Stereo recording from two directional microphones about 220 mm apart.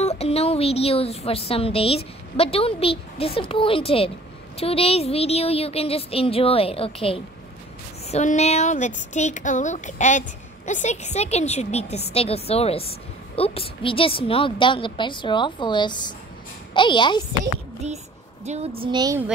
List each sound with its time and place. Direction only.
0.0 s a woman's voice: 30° left (ahead or behind)
18.4 s a woman's voice: 30° right (ahead or behind)